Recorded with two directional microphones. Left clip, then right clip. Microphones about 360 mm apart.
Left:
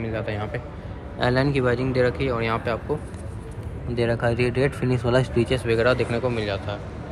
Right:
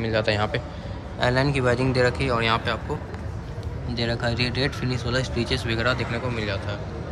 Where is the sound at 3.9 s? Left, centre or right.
Centre.